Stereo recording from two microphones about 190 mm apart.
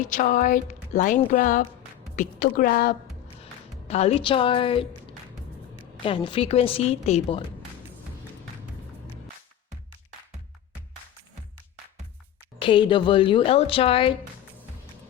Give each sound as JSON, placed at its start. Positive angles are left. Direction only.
{"t": 0.1, "sound": "a woman's voice", "side_deg": 45}
{"t": 3.4, "sound": "speech", "side_deg": 35}
{"t": 6.0, "sound": "a woman's voice", "side_deg": 25}
{"t": 12.5, "sound": "a woman's voice", "side_deg": 25}